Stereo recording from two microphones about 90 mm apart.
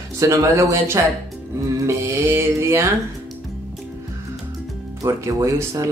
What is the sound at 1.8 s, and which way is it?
Music, 30° right (ahead or behind).